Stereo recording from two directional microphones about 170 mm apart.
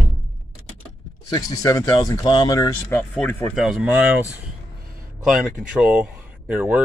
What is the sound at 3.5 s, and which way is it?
Speech, centre (ahead or behind).